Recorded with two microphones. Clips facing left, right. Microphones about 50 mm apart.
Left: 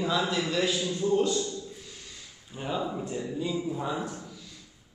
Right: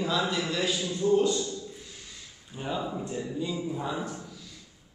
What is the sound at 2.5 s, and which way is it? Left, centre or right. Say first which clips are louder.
A man's voice: left 1 dB; centre.